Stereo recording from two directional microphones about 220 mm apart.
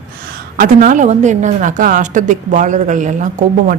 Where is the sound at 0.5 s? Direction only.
40° right (ahead or behind).